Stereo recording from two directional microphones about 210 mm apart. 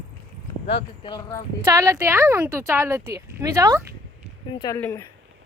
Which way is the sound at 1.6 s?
15° right (ahead or behind).